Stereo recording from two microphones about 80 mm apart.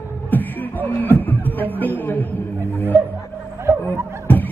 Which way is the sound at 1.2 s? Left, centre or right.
Left.